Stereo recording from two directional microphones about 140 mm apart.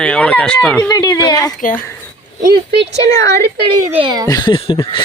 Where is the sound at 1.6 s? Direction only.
75° left (ahead or behind).